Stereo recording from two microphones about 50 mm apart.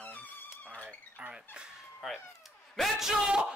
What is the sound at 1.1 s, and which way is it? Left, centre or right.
Speech, right.